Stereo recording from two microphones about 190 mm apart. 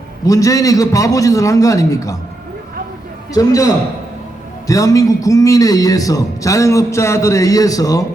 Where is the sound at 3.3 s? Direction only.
15° left (ahead or behind).